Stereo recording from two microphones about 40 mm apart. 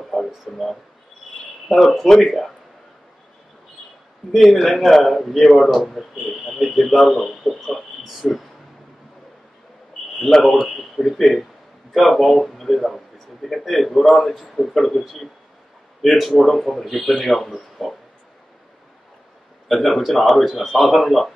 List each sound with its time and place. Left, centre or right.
0.0 s a sound: centre
1.7 s speech: centre
4.3 s speech: centre
10.1 s speech: centre
19.7 s speech: centre